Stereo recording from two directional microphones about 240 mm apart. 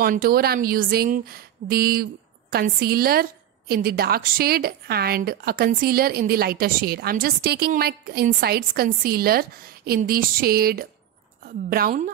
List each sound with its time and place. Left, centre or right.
0.0 s a woman's voice: right